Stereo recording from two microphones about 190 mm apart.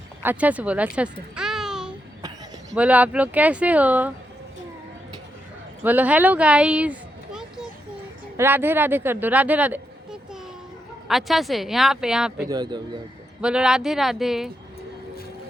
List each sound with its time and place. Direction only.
0.2 s a child's voice: 10° right (ahead or behind)
5.8 s speech: 10° right (ahead or behind)
8.4 s speech: 10° right (ahead or behind)
12.5 s speech: 20° right (ahead or behind)
13.4 s speech: 5° right (ahead or behind)